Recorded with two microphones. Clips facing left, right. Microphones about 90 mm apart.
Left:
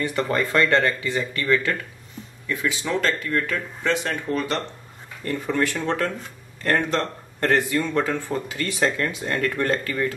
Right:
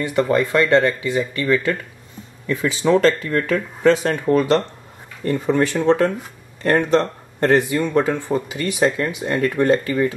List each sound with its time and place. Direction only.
0.0 s speech: 20° right (ahead or behind)
2.4 s speech: 30° right (ahead or behind)
3.8 s speech: 45° right (ahead or behind)
5.2 s speech: 20° right (ahead or behind)